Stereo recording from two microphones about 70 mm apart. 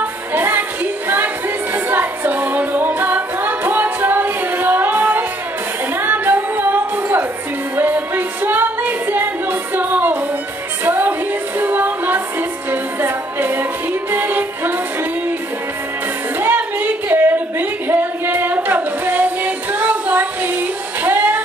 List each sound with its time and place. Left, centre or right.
0.0 s music: right
16.3 s singing: right